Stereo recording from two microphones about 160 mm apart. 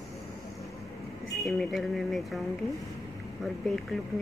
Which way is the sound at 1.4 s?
Centre (ahead or behind).